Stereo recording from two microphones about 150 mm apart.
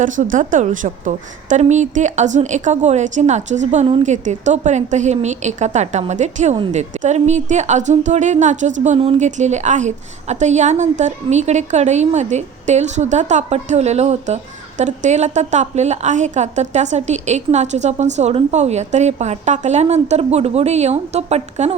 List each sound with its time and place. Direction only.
0.0 s a woman's voice: 60° right (ahead or behind)